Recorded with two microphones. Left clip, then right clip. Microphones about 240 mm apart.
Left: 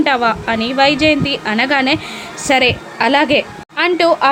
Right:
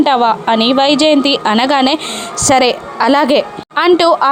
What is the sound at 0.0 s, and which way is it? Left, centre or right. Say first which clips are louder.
A woman's voice: right 3 dB; right.